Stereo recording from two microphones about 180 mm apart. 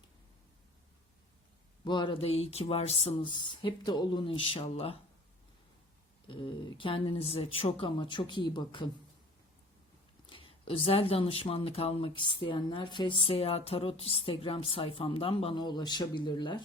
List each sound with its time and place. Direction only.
1.8 s speech: 25° left (ahead or behind)
6.2 s speech: 30° left (ahead or behind)
10.2 s speech: 30° left (ahead or behind)